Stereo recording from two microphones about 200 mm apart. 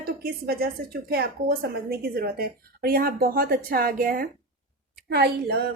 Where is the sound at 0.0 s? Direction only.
50° right (ahead or behind).